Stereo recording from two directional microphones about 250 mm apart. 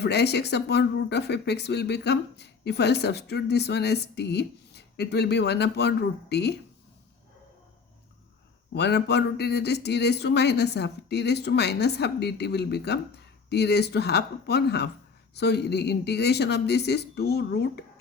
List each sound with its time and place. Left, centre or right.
0.0 s speech: left
8.7 s speech: left